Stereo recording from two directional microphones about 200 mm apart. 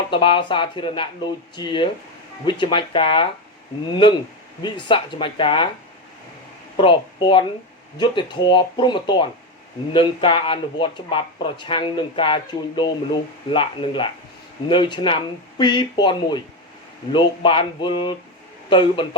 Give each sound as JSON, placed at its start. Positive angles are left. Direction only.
{"t": 0.1, "sound": "speech", "side_deg": 25}
{"t": 4.6, "sound": "speech", "side_deg": 25}
{"t": 6.7, "sound": "speech", "side_deg": 25}